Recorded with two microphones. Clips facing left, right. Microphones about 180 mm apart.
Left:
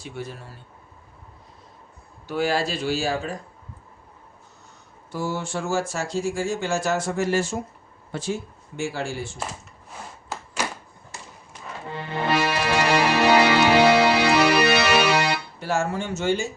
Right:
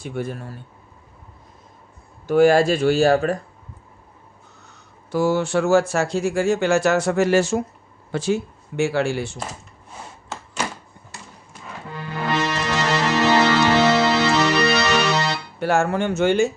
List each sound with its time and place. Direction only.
0.0 s speech: 55° right (ahead or behind)
2.2 s speech: 50° right (ahead or behind)
4.7 s speech: 75° right (ahead or behind)
11.9 s music: 25° left (ahead or behind)
12.3 s music: 10° left (ahead or behind)
15.6 s speech: 65° right (ahead or behind)